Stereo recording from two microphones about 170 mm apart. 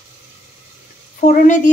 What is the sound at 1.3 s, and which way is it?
Speech, 45° left (ahead or behind).